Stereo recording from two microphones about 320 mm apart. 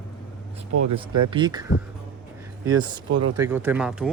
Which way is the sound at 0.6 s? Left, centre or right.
Centre.